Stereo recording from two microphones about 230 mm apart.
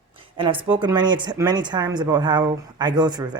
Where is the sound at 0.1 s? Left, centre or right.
Right.